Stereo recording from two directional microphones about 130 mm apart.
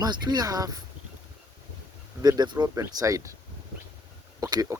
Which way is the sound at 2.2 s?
30° right (ahead or behind).